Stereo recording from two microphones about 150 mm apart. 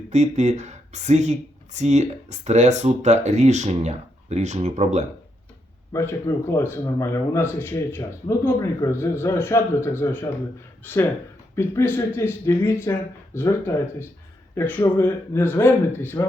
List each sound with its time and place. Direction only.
0.1 s speech: 50° right (ahead or behind)
5.9 s speech: 20° left (ahead or behind)